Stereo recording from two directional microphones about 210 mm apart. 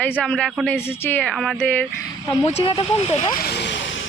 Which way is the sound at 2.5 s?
25° left (ahead or behind).